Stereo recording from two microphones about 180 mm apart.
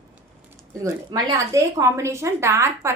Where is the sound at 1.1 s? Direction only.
20° right (ahead or behind).